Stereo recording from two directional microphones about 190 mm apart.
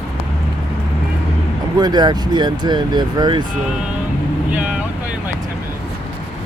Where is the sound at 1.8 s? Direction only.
20° right (ahead or behind).